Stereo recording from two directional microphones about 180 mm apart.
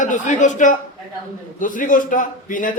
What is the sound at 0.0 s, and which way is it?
A man's voice, 45° left (ahead or behind).